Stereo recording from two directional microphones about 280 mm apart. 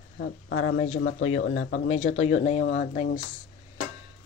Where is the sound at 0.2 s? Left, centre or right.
Left.